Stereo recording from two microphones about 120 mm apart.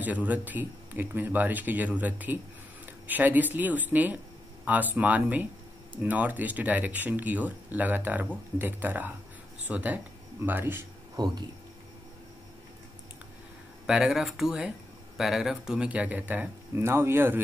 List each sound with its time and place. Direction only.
0.0 s speech: 15° right (ahead or behind)
11.2 s speech: 35° right (ahead or behind)
13.8 s speech: 5° right (ahead or behind)